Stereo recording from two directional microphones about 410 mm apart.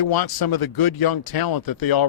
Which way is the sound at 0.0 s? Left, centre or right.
Left.